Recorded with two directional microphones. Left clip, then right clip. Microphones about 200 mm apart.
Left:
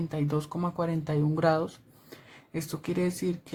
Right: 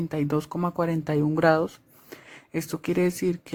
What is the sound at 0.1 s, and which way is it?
Speech, 35° right (ahead or behind).